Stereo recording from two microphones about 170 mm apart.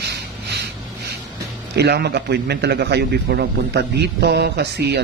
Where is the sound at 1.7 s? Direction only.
75° right (ahead or behind).